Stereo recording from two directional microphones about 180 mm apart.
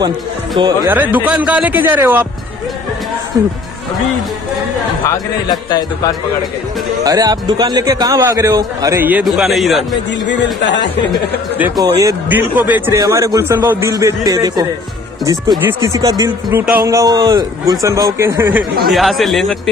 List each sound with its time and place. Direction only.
0.8 s a man's voice: 10° right (ahead or behind)
3.3 s speech: 20° right (ahead or behind)
5.1 s a man's voice: 20° left (ahead or behind)
7.0 s a man's voice: 20° right (ahead or behind); by 9.8 s centre (ahead or behind)
10.2 s speech: 80° left
11.5 s a man's voice: 10° right (ahead or behind)
11.8 s a man's voice: 20° right (ahead or behind)
18.9 s a man's voice: centre (ahead or behind)